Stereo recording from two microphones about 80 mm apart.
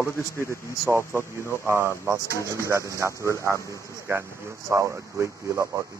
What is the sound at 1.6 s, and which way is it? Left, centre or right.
A man's voice, right.